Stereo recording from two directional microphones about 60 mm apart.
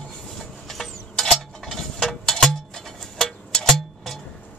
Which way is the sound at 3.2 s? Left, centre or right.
Centre.